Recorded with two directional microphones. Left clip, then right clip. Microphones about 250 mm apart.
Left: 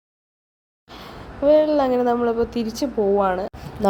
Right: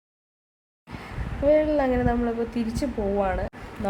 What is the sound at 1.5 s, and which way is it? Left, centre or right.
A woman's voice, centre.